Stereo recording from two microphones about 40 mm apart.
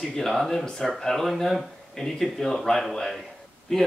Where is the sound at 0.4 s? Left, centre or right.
Centre.